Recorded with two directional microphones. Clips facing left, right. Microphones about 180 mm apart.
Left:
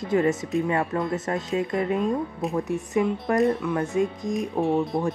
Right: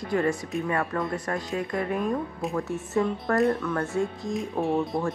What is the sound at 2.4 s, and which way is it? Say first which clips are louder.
Speech: left 3 dB; centre (ahead or behind).